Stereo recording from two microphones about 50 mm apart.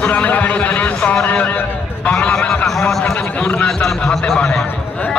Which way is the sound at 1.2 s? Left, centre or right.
Left.